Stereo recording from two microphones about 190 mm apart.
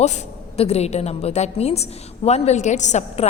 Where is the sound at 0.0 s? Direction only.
35° left (ahead or behind).